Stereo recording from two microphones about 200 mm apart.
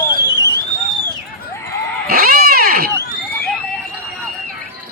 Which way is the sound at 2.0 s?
50° right (ahead or behind).